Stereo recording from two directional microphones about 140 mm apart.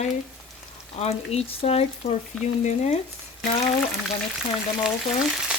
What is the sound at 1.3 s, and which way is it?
Speech, 45° left (ahead or behind).